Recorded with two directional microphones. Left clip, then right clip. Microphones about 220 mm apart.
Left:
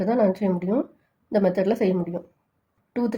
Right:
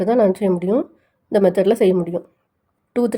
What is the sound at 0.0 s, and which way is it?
Speech, 40° right (ahead or behind).